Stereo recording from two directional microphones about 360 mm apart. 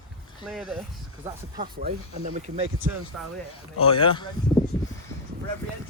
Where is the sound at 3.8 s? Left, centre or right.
Centre.